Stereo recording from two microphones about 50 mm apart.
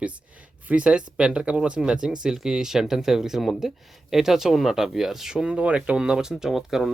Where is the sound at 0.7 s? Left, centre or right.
Right.